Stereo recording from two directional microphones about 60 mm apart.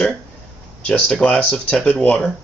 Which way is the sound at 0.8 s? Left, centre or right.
Centre.